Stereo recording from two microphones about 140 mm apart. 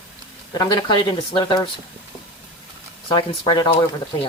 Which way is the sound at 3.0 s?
30° left (ahead or behind).